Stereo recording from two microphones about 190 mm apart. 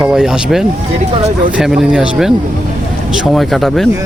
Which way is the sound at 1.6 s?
5° right (ahead or behind).